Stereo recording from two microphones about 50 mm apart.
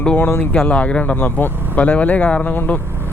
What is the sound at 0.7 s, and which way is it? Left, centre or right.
Speech, left.